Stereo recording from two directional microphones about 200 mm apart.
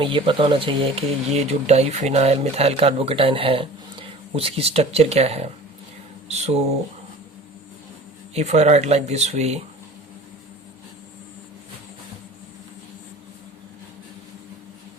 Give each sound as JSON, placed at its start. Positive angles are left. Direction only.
{"t": 0.0, "sound": "speech", "side_deg": -25}
{"t": 8.3, "sound": "speech", "side_deg": -35}